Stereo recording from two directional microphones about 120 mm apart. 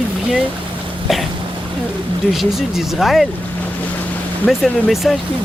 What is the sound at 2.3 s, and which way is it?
Speech, centre (ahead or behind).